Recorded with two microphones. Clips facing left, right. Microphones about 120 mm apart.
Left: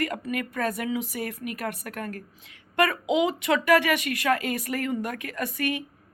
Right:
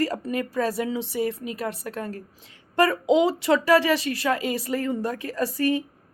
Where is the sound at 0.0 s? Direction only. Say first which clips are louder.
Right 3 dB; 30° right (ahead or behind).